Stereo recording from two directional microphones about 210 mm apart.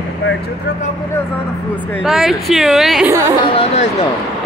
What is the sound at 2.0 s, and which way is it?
Speech, centre (ahead or behind).